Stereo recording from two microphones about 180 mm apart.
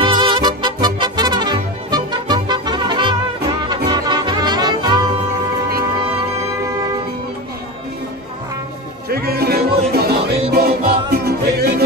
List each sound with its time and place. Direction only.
0.0 s music: 25° right (ahead or behind)
9.1 s music: 60° right (ahead or behind)